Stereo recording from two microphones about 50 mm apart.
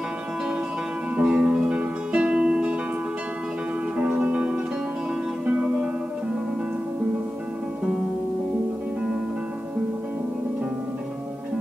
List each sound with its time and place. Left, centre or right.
1.1 s music: right
4.2 s music: right